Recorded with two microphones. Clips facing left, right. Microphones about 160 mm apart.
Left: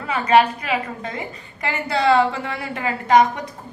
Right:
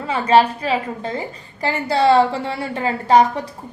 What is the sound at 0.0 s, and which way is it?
A woman's voice, 30° right (ahead or behind).